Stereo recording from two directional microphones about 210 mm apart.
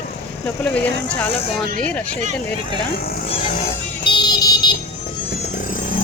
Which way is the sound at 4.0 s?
20° left (ahead or behind).